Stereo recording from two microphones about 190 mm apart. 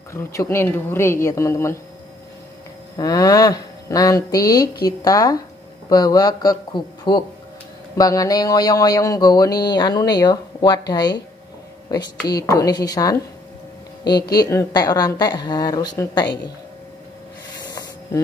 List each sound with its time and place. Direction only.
0.1 s a woman's voice: 15° left (ahead or behind)
3.0 s mantra: 20° left (ahead or behind)
17.6 s a sound: 20° left (ahead or behind)